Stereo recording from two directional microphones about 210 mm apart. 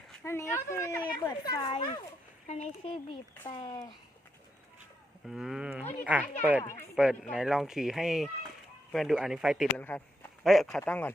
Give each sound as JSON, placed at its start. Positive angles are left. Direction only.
{"t": 0.3, "sound": "speech", "side_deg": 15}
{"t": 5.2, "sound": "speech", "side_deg": 0}